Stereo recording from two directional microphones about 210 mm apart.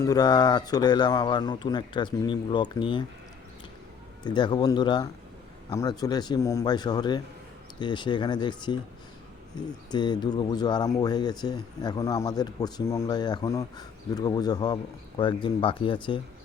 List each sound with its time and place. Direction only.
0.0 s speech: 20° left (ahead or behind)
4.2 s speech: 20° left (ahead or behind)